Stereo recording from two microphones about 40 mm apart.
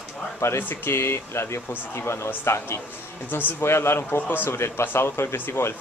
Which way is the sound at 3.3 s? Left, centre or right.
Left.